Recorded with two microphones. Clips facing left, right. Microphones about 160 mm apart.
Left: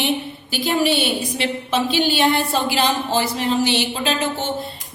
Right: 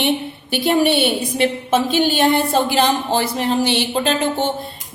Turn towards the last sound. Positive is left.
turn(degrees=-50)  # may be behind; listen again after turning